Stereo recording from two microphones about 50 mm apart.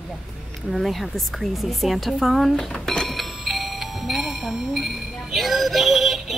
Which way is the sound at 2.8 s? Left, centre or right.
Centre.